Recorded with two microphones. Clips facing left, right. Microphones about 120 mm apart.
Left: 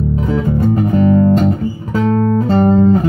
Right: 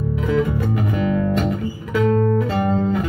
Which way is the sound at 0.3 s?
35° left (ahead or behind).